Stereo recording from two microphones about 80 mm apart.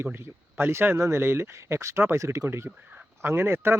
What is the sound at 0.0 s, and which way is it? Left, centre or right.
Speech, right.